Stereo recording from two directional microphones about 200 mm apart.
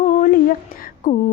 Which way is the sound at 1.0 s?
40° left (ahead or behind).